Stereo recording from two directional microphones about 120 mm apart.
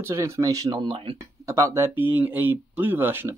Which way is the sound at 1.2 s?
25° right (ahead or behind).